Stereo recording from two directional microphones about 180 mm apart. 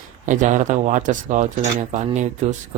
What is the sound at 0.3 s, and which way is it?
Speech, 45° right (ahead or behind).